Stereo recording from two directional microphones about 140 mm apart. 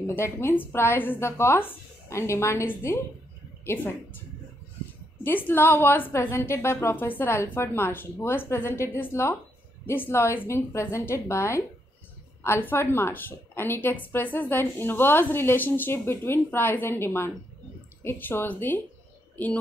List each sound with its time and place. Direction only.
0.0 s a woman's voice: 20° left (ahead or behind)
5.2 s a woman's voice: 15° left (ahead or behind)